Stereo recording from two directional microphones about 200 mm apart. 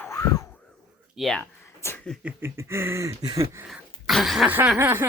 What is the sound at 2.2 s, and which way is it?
Speech, 10° right (ahead or behind).